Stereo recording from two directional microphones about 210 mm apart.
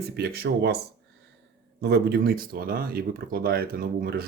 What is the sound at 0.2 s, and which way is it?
Speech, 50° right (ahead or behind).